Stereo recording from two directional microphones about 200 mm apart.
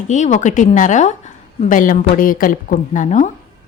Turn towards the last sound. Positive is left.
turn(degrees=40)  # may be behind; listen again after turning